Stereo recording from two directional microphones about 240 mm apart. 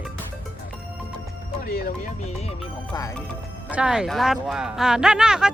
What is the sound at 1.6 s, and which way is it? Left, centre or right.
Speech, left.